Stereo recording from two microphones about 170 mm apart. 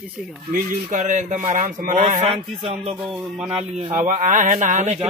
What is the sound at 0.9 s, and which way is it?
Speech, 45° right (ahead or behind).